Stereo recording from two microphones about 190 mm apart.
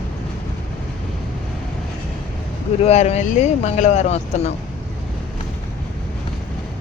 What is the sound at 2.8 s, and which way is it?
Speech, 35° left (ahead or behind).